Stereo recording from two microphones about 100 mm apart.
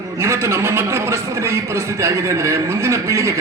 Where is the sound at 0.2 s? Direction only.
25° right (ahead or behind).